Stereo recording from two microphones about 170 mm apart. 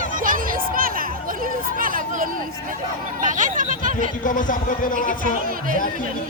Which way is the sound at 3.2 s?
50° right (ahead or behind).